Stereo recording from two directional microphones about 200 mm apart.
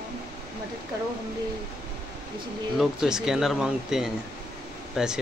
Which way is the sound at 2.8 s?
5° right (ahead or behind).